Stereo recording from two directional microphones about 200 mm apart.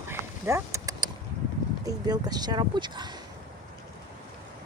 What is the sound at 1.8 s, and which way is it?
Speech, 20° right (ahead or behind).